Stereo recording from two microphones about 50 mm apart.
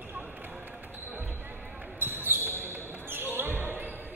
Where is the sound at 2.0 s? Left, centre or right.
Right.